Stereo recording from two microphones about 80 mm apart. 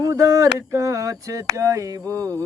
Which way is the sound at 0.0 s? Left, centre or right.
Right.